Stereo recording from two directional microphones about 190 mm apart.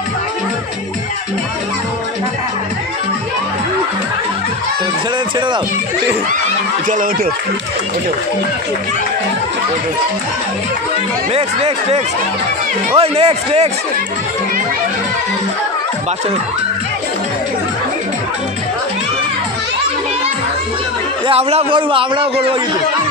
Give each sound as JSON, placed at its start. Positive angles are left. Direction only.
{"t": 11.3, "sound": "a man's voice", "side_deg": -35}
{"t": 21.3, "sound": "a man's voice", "side_deg": -35}